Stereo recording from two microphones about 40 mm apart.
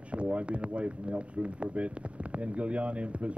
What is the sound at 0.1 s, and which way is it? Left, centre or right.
Speech, right.